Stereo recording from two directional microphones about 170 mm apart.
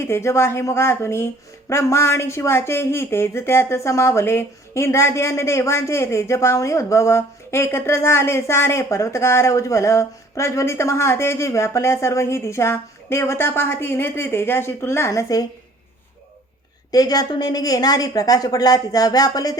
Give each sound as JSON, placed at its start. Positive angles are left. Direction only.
{"t": 0.0, "sound": "speech", "side_deg": 15}
{"t": 16.9, "sound": "a woman's voice", "side_deg": 20}